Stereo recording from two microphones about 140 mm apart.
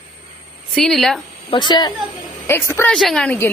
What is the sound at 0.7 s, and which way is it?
Speech, centre (ahead or behind).